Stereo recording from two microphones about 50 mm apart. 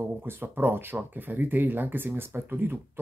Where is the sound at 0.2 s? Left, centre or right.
Right.